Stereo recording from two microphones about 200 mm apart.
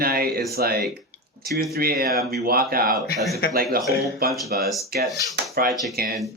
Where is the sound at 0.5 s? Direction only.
50° right (ahead or behind).